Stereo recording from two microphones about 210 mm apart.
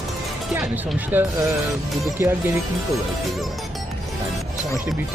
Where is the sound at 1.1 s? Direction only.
10° right (ahead or behind).